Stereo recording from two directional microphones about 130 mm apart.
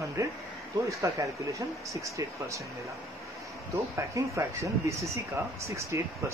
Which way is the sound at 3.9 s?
25° right (ahead or behind).